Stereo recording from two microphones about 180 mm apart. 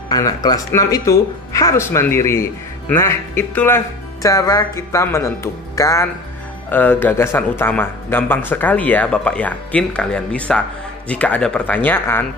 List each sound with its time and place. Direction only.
0.1 s speech: 20° left (ahead or behind)